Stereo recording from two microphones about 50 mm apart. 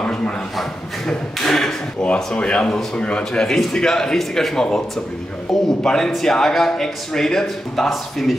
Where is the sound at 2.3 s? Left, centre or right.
Left.